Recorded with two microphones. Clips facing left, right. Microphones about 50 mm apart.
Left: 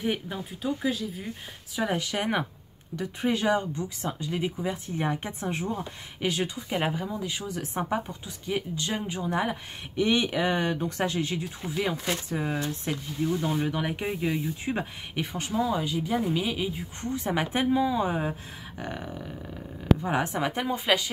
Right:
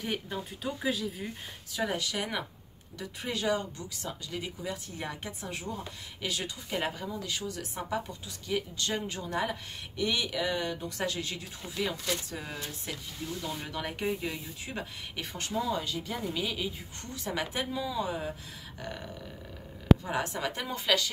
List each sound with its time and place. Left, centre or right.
0.0 s speech: centre
0.6 s speech: centre
1.9 s speech: left
10.0 s speech: left
12.5 s speech: left
13.2 s speech: left
15.3 s speech: centre